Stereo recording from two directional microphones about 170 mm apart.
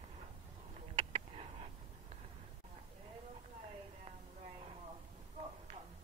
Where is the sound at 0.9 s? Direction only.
35° right (ahead or behind).